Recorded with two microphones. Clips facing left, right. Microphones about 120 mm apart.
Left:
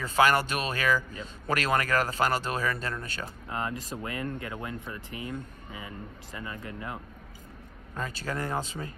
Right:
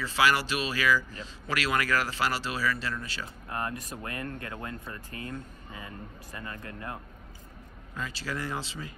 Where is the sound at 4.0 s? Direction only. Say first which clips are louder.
Left 3 dB; 20° left (ahead or behind).